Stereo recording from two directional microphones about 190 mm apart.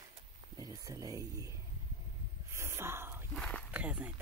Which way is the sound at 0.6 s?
20° right (ahead or behind).